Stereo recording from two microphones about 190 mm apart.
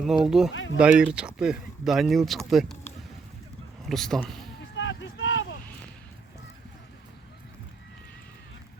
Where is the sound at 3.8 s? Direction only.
Centre (ahead or behind).